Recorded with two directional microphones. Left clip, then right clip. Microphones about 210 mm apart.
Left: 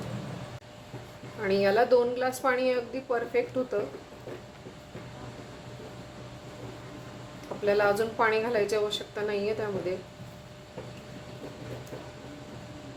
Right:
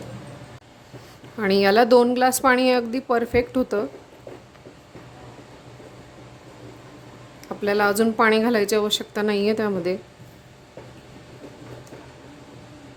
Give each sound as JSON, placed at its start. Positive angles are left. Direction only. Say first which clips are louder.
{"t": 1.4, "sound": "a woman's voice", "louder": "right 7 dB", "side_deg": -55}
{"t": 7.6, "sound": "a woman's voice", "louder": "right 5 dB", "side_deg": -50}